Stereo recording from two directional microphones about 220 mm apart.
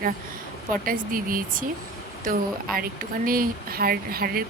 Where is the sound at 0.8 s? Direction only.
40° right (ahead or behind).